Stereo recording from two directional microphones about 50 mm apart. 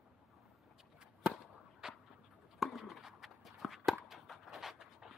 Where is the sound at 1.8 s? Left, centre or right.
Centre.